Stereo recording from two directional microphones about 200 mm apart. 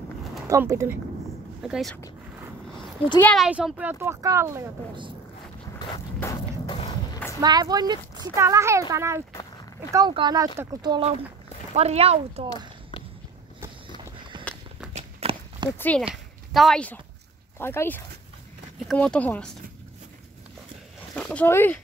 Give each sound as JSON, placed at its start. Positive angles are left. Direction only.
{"t": 0.5, "sound": "speech", "side_deg": -15}
{"t": 1.6, "sound": "speech", "side_deg": 0}
{"t": 3.2, "sound": "speech", "side_deg": 5}
{"t": 3.4, "sound": "speech", "side_deg": -5}
{"t": 6.1, "sound": "a sound", "side_deg": 15}
{"t": 6.6, "sound": "a sound", "side_deg": 25}
{"t": 7.3, "sound": "speech", "side_deg": -20}
{"t": 11.7, "sound": "speech", "side_deg": -30}
{"t": 14.3, "sound": "walk", "side_deg": -25}
{"t": 15.0, "sound": "a sound", "side_deg": -30}
{"t": 15.8, "sound": "speech", "side_deg": 5}
{"t": 21.1, "sound": "speech", "side_deg": 5}